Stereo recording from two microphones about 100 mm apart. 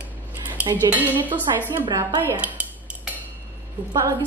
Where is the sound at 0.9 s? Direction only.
15° right (ahead or behind).